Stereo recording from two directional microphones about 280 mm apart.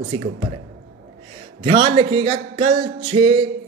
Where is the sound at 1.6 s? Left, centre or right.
Right.